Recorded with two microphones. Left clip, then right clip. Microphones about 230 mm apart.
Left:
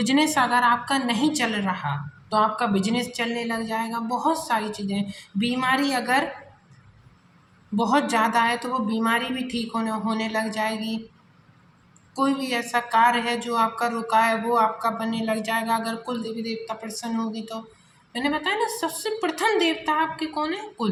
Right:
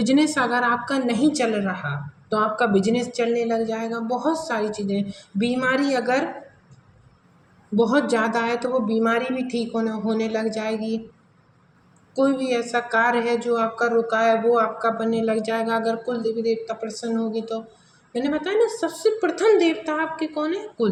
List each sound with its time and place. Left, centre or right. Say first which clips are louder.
0.0 s a woman's voice: right 1 dB; left
7.8 s a woman's voice: right 1 dB; left
12.1 s a woman's voice: right 3 dB; left